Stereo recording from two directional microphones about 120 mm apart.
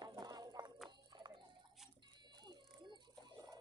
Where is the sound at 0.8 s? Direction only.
40° right (ahead or behind).